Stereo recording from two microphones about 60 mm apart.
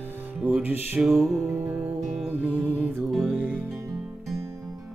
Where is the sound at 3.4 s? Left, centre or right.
Right.